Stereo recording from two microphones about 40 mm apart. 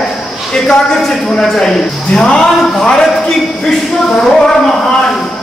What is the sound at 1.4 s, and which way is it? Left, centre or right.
A man's voice, centre.